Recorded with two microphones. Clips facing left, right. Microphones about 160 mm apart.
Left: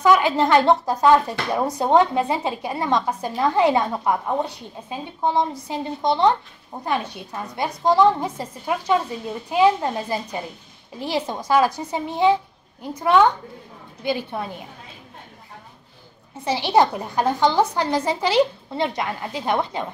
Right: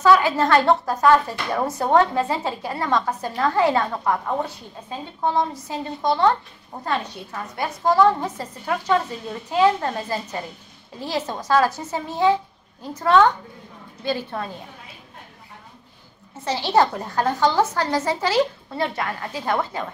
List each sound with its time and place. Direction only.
0.0 s a woman's voice: 15° left (ahead or behind)
16.3 s a woman's voice: 15° left (ahead or behind)